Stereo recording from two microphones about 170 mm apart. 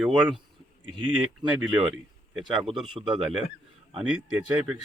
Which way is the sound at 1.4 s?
25° right (ahead or behind).